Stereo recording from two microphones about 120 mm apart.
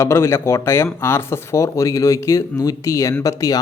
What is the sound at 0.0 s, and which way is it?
Speech, 25° left (ahead or behind).